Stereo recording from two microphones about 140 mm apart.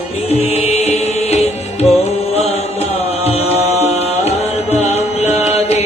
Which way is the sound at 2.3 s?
50° left (ahead or behind).